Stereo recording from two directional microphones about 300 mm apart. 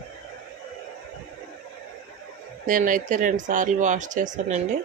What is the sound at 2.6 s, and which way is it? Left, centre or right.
Speech, right.